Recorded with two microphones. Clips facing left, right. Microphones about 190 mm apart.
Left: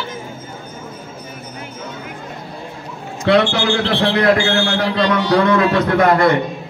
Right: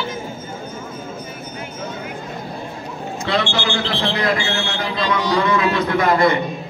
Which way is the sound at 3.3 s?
65° left (ahead or behind).